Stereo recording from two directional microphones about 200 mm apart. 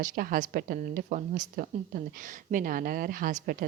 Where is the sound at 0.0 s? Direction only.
45° right (ahead or behind).